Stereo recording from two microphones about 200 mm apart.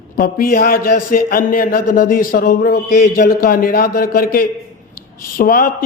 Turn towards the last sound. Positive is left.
turn(degrees=45)  # may be behind; listen again after turning